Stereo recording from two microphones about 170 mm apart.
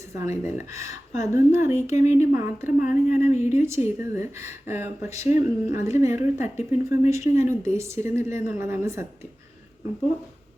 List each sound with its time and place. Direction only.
0.1 s speech: 15° right (ahead or behind)